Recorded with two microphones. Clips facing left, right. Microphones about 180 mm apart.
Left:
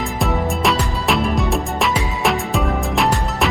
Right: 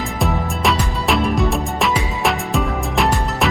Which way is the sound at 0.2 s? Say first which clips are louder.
Left 1 dB; centre (ahead or behind).